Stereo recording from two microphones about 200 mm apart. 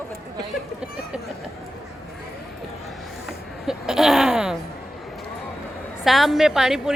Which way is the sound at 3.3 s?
Centre (ahead or behind).